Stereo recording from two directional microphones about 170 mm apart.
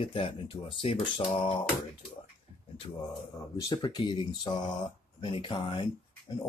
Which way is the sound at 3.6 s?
25° left (ahead or behind).